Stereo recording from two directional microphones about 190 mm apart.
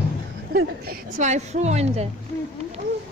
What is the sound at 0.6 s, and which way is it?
Speech, 55° right (ahead or behind).